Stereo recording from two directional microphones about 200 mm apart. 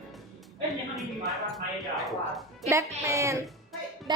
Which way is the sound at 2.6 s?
15° right (ahead or behind).